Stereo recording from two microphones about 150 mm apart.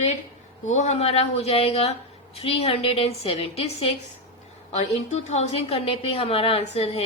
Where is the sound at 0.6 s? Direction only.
50° left (ahead or behind).